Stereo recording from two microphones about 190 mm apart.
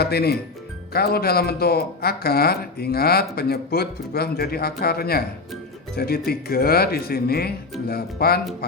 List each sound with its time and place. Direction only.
0.0 s speech: 55° left (ahead or behind)